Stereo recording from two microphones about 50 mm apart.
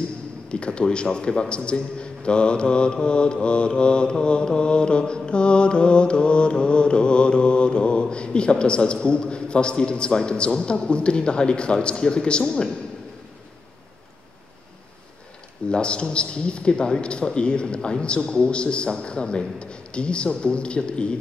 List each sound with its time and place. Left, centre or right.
0.5 s a man's voice: left
15.7 s a man's voice: centre